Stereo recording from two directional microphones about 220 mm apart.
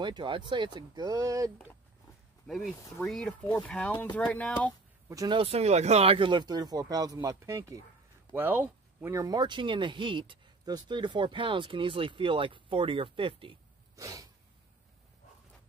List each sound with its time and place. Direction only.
0.0 s speech: 20° right (ahead or behind)
2.4 s speech: centre (ahead or behind)
5.1 s speech: 20° right (ahead or behind)